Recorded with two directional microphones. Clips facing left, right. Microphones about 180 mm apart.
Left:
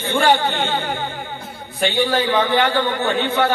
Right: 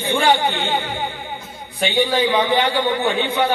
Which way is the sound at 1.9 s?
15° right (ahead or behind).